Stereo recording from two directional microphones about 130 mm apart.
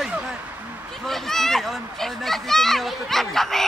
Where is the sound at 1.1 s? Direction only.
5° left (ahead or behind).